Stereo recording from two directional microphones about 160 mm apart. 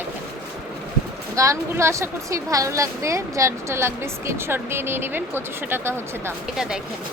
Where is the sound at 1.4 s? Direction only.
20° right (ahead or behind).